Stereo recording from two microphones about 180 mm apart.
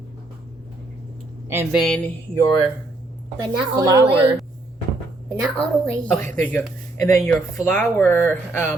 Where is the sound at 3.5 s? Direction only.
20° right (ahead or behind).